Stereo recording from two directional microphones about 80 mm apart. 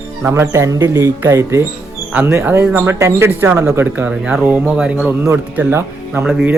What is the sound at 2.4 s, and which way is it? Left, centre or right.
Speech, right.